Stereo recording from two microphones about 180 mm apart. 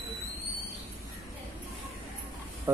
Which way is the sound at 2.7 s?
15° right (ahead or behind).